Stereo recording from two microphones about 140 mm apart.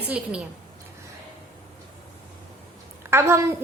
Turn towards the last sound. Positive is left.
turn(degrees=-20)  # may be behind; listen again after turning